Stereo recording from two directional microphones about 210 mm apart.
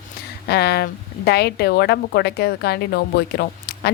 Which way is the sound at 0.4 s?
50° left (ahead or behind).